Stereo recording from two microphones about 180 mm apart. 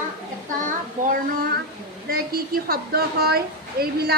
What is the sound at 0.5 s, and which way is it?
A child's voice, 45° right (ahead or behind).